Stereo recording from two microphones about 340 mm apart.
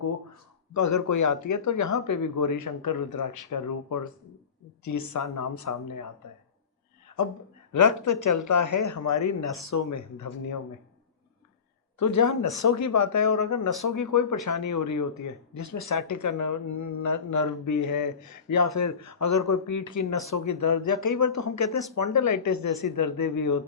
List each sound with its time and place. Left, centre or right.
0.7 s speech: left
7.7 s speech: left
11.9 s speech: left